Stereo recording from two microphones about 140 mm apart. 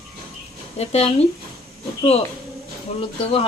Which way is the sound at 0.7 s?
50° left (ahead or behind).